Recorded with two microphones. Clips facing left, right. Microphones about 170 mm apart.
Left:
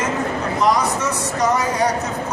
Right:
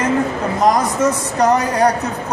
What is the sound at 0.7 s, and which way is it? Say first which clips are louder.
A man's voice: right 4 dB; 55° right (ahead or behind).